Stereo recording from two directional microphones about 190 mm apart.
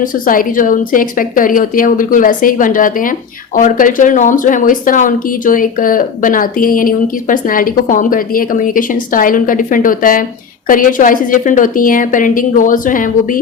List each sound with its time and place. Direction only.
0.0 s speech: 45° left (ahead or behind)